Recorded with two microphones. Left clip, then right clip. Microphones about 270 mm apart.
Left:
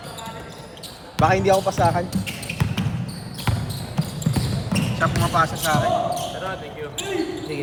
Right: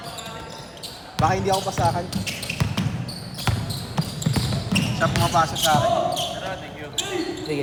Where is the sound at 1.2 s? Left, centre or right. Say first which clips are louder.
Left 4 dB; left.